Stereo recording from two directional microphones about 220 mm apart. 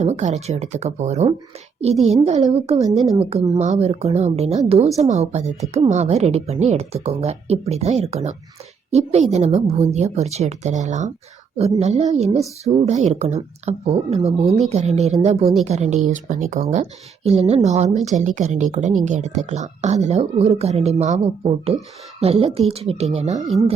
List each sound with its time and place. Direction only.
0.0 s speech: 30° right (ahead or behind)
2.5 s a woman's voice: 30° right (ahead or behind)